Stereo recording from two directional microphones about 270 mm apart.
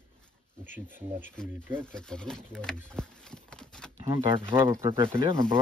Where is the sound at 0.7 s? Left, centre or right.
Centre.